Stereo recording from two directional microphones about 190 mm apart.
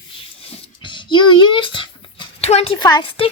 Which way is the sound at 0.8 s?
25° left (ahead or behind).